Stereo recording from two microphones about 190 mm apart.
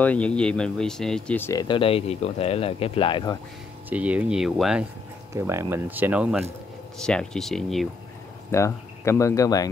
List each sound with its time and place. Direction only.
0.0 s speech: 5° left (ahead or behind); by 3.3 s 25° left (ahead or behind)
3.9 s speech: 5° right (ahead or behind)
5.3 s speech: 15° right (ahead or behind)
7.0 s speech: 5° left (ahead or behind)
8.5 s speech: 15° left (ahead or behind)